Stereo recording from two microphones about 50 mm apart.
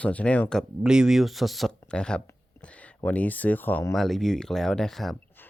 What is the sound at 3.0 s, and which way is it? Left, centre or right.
Speech, left.